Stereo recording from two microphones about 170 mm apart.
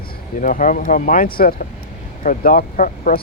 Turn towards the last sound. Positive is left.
turn(degrees=55)  # may be behind; listen again after turning